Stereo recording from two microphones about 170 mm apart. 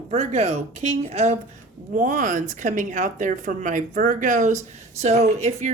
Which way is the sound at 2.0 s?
50° right (ahead or behind).